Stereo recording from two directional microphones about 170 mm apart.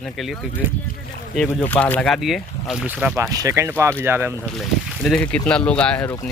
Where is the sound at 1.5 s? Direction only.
10° left (ahead or behind); by 3.1 s 5° right (ahead or behind).